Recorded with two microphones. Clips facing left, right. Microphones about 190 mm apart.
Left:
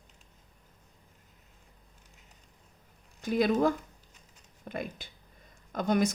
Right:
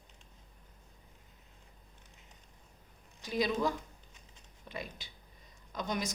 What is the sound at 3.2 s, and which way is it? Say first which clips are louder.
Speech: left 6 dB; 55° left (ahead or behind).